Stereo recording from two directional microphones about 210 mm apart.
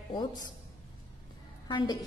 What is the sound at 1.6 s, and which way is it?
Speech, 20° left (ahead or behind).